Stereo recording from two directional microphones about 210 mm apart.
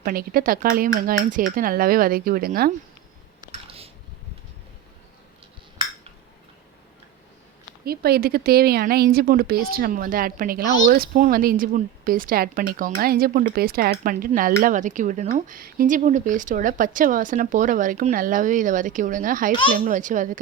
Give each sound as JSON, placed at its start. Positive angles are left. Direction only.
{"t": 0.0, "sound": "speech", "side_deg": -45}
{"t": 3.4, "sound": "a sound", "side_deg": -25}
{"t": 7.9, "sound": "speech", "side_deg": -45}